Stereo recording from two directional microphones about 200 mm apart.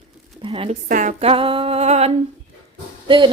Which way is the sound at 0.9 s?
40° right (ahead or behind).